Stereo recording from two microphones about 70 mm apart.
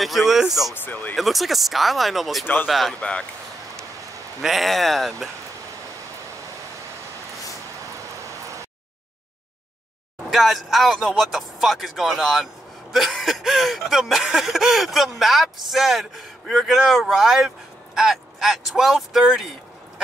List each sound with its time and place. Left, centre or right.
0.3 s speech: centre
0.8 s speech: left
1.1 s speech: centre
2.4 s speech: left
2.9 s speech: centre
4.4 s speech: centre
10.3 s speech: centre